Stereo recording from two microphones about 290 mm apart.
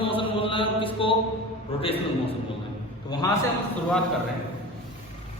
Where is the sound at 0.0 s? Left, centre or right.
Centre.